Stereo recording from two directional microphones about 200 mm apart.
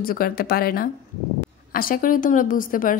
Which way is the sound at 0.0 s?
45° left (ahead or behind).